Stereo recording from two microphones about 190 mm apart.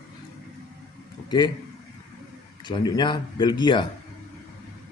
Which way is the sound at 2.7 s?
25° left (ahead or behind).